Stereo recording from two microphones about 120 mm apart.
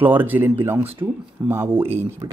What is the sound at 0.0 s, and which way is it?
Speech, 15° right (ahead or behind).